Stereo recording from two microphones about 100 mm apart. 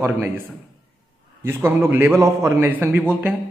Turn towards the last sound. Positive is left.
turn(degrees=-15)  # may be behind; listen again after turning